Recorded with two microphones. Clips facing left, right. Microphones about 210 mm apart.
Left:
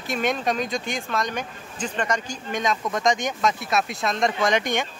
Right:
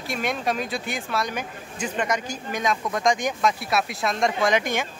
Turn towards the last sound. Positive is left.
turn(degrees=0)  # may be behind; listen again after turning